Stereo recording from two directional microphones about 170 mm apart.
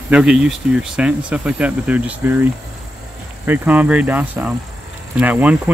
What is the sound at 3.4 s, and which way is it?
Speech, 10° right (ahead or behind).